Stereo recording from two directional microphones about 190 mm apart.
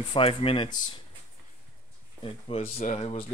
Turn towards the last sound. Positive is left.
turn(degrees=35)  # may be behind; listen again after turning